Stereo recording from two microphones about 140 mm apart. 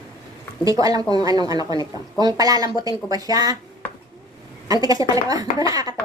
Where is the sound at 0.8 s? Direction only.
30° right (ahead or behind).